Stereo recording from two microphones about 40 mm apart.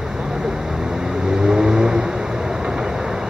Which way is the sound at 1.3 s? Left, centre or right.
Centre.